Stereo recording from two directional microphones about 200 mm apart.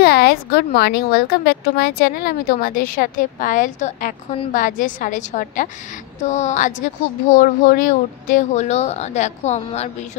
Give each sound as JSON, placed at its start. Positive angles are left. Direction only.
{"t": 0.0, "sound": "speech", "side_deg": 50}